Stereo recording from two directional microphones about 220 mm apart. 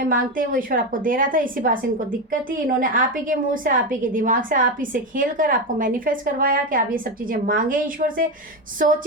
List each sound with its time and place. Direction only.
0.0 s a woman's voice: 40° right (ahead or behind)